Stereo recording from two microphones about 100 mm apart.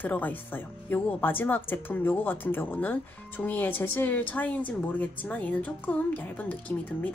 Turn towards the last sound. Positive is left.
turn(degrees=15)  # may be behind; listen again after turning